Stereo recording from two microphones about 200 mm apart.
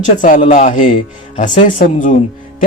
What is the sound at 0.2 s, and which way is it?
Speech, 40° left (ahead or behind).